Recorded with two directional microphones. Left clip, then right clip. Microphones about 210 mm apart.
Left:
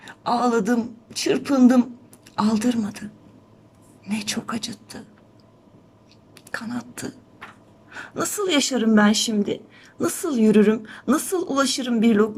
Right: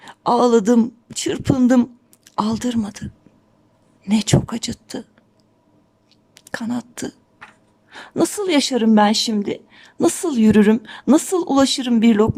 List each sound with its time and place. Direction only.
0.0 s a woman's voice: 25° right (ahead or behind)
6.3 s a woman's voice: 30° right (ahead or behind)